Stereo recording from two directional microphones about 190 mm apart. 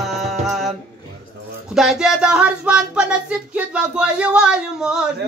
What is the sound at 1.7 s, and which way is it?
Speech, centre (ahead or behind).